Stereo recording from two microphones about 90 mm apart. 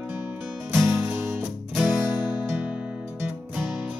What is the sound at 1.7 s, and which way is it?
Music, 5° right (ahead or behind).